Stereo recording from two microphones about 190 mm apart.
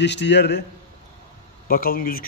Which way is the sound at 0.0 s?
65° left (ahead or behind).